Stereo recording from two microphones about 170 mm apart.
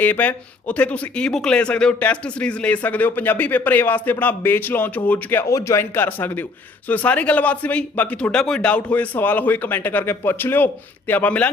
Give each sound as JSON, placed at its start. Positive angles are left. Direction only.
{"t": 0.0, "sound": "speech", "side_deg": 10}